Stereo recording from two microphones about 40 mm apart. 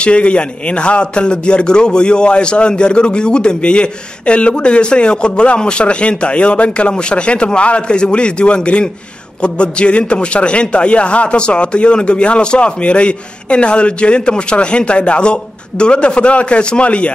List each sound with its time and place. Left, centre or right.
0.0 s a man's voice: left